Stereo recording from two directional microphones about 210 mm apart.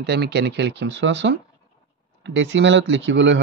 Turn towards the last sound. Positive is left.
turn(degrees=-60)  # may be behind; listen again after turning